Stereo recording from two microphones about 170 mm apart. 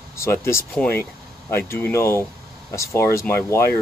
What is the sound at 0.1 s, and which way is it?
Speech, 15° left (ahead or behind).